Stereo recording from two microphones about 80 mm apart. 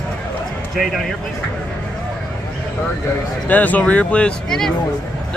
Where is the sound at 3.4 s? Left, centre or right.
Left.